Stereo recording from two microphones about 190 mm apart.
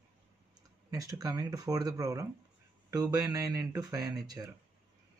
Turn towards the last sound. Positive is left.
turn(degrees=-20)  # may be behind; listen again after turning